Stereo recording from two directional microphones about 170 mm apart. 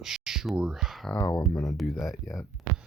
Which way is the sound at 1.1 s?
20° left (ahead or behind).